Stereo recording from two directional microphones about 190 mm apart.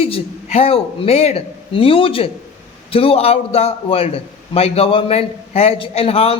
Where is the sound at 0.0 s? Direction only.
30° left (ahead or behind).